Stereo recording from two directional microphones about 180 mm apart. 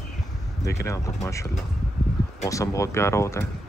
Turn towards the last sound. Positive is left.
turn(degrees=15)  # may be behind; listen again after turning